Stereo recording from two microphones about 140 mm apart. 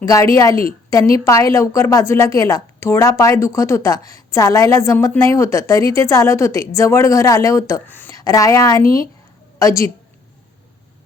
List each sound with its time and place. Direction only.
0.0 s a woman's voice: 25° left (ahead or behind)